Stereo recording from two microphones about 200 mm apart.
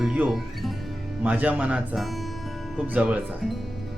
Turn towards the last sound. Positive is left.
turn(degrees=-5)  # may be behind; listen again after turning